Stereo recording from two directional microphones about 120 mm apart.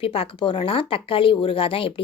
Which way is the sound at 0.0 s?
50° left (ahead or behind).